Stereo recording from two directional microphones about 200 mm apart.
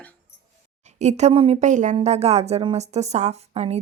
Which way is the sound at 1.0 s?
35° right (ahead or behind).